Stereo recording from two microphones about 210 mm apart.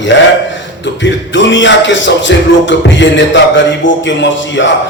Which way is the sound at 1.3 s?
60° left (ahead or behind).